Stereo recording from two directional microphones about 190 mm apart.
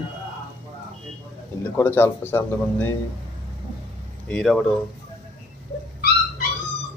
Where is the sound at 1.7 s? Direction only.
10° left (ahead or behind).